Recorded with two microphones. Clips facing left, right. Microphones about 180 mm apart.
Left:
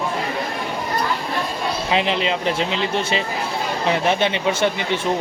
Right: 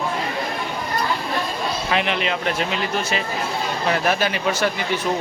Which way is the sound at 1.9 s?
25° left (ahead or behind).